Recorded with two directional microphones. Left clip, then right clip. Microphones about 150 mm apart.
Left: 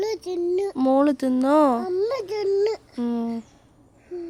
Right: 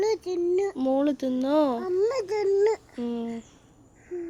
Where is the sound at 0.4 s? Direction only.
15° left (ahead or behind).